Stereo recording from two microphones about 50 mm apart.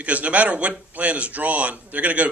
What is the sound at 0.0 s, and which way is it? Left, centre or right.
A man's voice, right.